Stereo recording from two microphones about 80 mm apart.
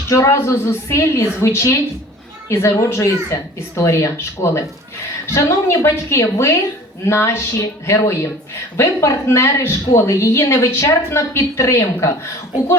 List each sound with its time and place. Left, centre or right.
0.1 s speech: left